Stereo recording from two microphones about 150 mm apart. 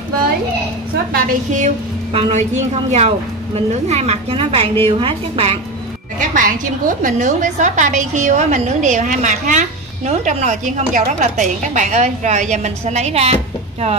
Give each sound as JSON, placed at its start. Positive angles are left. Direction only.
{"t": 1.1, "sound": "a woman's voice", "side_deg": -55}
{"t": 2.1, "sound": "a woman's voice", "side_deg": -45}
{"t": 6.1, "sound": "a woman's voice", "side_deg": -60}